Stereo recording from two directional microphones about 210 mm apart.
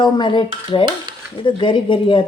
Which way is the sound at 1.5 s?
25° left (ahead or behind).